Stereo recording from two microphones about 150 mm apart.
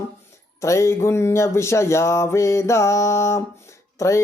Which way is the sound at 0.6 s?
20° left (ahead or behind).